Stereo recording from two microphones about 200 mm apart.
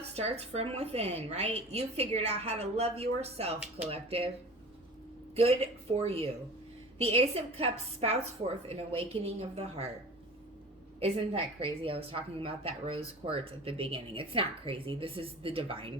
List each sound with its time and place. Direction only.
0.1 s a woman's voice: 30° right (ahead or behind)
6.0 s a woman's voice: 30° right (ahead or behind)
11.0 s a woman's voice: 30° right (ahead or behind)